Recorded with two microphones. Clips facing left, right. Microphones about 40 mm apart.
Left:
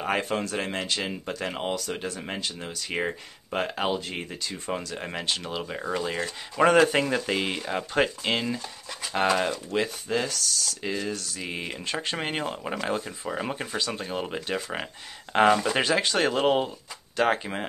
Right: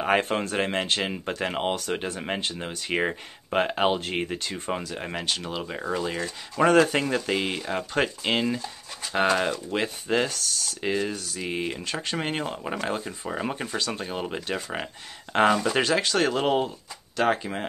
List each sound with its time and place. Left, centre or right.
0.2 s speech: right
4.6 s speech: centre
10.0 s speech: right
11.0 s speech: centre
11.8 s speech: centre